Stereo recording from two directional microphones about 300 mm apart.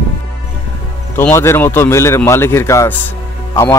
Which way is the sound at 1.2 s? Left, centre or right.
Centre.